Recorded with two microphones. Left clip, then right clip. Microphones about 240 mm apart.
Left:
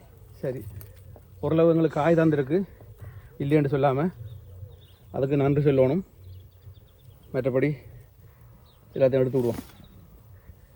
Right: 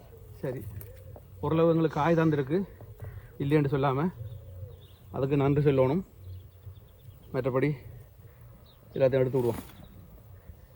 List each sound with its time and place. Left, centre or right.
0.4 s a man's voice: right
5.1 s a man's voice: centre
7.3 s a man's voice: centre
8.9 s speech: right